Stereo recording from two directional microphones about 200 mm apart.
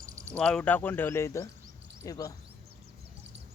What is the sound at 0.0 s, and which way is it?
Cricket, 15° right (ahead or behind).